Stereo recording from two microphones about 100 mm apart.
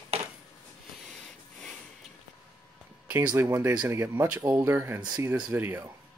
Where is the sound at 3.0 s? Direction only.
20° right (ahead or behind).